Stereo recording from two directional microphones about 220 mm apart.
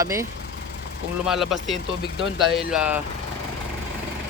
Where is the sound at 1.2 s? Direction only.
Centre (ahead or behind).